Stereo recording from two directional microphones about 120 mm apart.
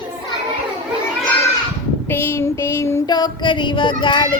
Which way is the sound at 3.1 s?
35° left (ahead or behind).